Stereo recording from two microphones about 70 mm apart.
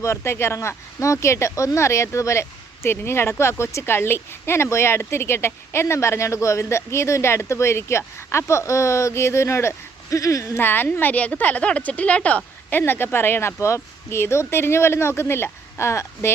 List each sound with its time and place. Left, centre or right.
0.0 s speech: left
10.6 s a woman's voice: left
12.7 s speech: left